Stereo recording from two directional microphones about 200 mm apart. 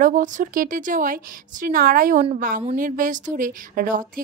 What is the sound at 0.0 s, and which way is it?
A woman's voice, 40° right (ahead or behind).